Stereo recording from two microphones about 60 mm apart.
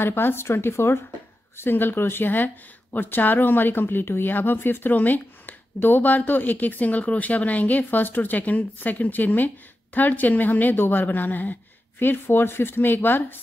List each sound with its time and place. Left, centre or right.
0.0 s a woman's voice: left